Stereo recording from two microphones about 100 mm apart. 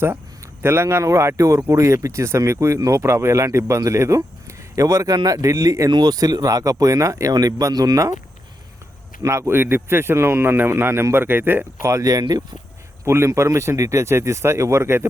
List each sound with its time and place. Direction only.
0.6 s speech: 25° right (ahead or behind)
9.2 s speech: 25° right (ahead or behind)